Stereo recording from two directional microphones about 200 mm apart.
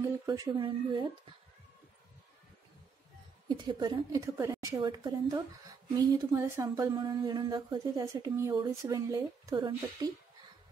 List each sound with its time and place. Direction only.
0.0 s a woman's voice: 20° right (ahead or behind)
3.4 s a woman's voice: 20° right (ahead or behind)